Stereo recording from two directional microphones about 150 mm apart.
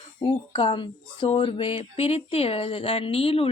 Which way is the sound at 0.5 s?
35° left (ahead or behind).